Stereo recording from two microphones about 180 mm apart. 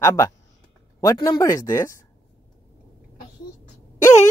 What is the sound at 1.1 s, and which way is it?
Speech, 20° left (ahead or behind).